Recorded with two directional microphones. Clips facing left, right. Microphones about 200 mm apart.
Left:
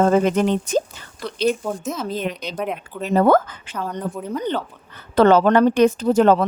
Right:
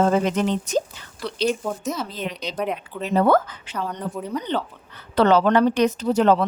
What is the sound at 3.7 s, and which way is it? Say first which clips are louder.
Speech: left 1 dB; 5° left (ahead or behind).